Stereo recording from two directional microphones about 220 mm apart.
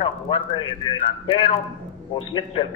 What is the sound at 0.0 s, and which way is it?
A man's voice, 25° left (ahead or behind).